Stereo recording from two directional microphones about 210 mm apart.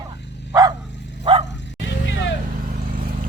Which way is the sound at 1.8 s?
60° left (ahead or behind).